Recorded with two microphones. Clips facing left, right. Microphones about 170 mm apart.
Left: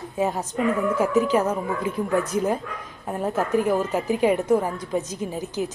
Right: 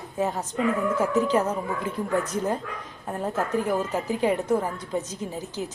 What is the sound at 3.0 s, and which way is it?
A woman's voice, 15° left (ahead or behind).